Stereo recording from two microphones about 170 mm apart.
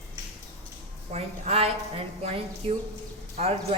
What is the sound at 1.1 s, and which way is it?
A woman's voice, 35° right (ahead or behind).